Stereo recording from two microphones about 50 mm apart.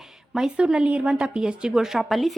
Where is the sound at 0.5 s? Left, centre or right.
Centre.